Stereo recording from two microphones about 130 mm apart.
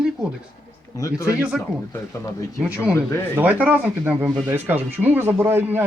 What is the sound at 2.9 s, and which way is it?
Speech, 20° left (ahead or behind).